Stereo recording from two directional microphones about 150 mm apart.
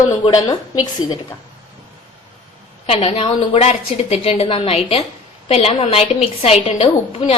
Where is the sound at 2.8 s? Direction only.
40° left (ahead or behind).